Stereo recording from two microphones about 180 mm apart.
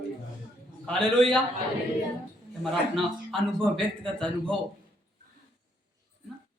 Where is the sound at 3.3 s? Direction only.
5° left (ahead or behind).